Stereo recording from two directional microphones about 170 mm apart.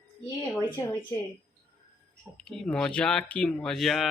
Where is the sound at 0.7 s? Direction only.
30° left (ahead or behind).